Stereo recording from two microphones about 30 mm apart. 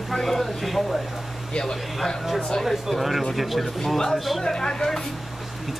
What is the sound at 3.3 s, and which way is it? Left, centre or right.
Speech, centre.